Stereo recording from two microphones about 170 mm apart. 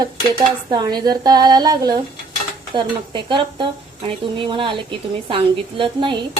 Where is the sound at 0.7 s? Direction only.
25° right (ahead or behind).